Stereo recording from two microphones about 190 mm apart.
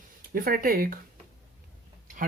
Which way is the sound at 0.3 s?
50° right (ahead or behind).